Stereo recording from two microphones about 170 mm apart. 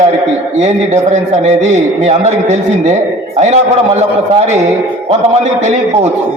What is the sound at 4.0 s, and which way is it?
Speech, 40° right (ahead or behind).